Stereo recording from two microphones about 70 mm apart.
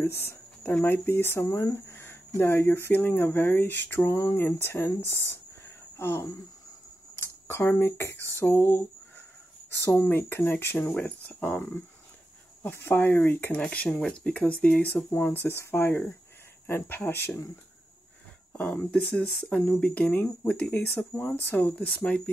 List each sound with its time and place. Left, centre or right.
0.0 s speech: left
4.4 s speech: left
13.6 s speech: centre
15.0 s speech: left
18.9 s speech: centre